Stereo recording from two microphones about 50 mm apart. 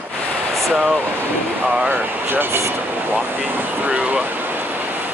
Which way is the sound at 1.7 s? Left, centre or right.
Right.